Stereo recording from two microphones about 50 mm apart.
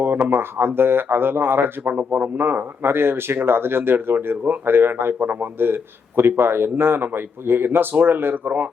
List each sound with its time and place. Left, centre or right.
0.3 s speech: right